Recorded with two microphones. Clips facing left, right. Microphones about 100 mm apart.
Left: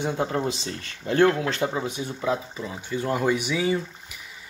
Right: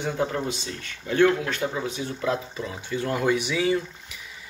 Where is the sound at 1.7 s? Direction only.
20° left (ahead or behind).